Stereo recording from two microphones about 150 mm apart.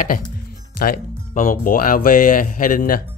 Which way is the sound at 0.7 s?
75° left (ahead or behind).